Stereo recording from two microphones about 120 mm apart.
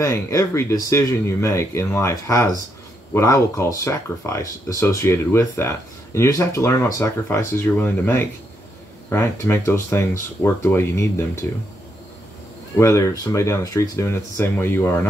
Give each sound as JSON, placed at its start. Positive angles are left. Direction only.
{"t": 0.0, "sound": "speech", "side_deg": 25}
{"t": 12.7, "sound": "speech", "side_deg": 25}